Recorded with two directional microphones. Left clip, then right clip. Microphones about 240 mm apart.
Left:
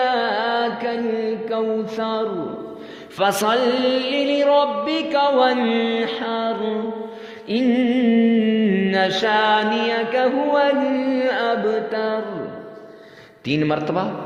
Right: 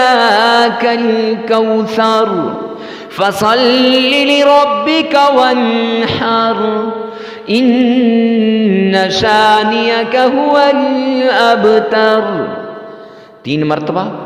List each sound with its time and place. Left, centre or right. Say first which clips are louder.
0.0 s mantra: right 11 dB; right
1.5 s music: right 11 dB; right
10.8 s carnatic music: right 7 dB; centre
11.2 s music: right 13 dB; right
13.5 s music: right 6 dB; right